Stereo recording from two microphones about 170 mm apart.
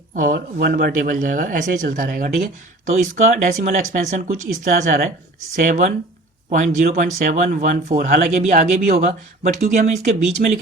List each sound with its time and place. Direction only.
0.3 s speech: 70° right (ahead or behind); by 10.6 s 40° right (ahead or behind)